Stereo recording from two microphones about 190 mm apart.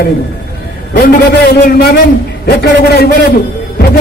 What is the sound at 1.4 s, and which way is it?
A man's voice, 50° left (ahead or behind).